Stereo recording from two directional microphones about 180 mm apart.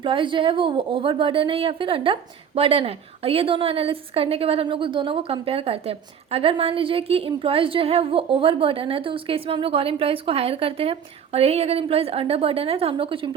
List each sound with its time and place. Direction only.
0.0 s a woman's voice: 30° right (ahead or behind)